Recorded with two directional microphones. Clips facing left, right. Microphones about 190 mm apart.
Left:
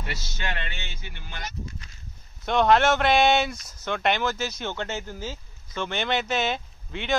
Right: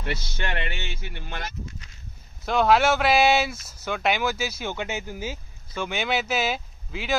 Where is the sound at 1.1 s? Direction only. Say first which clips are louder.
Right 2 dB; 55° right (ahead or behind).